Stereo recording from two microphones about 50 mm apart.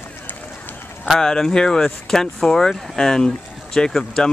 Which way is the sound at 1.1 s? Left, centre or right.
Centre.